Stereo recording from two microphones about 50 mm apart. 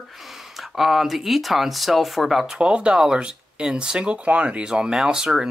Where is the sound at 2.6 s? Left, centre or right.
Right.